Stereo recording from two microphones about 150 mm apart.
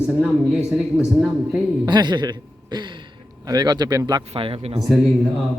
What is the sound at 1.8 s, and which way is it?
A man's voice, 30° right (ahead or behind).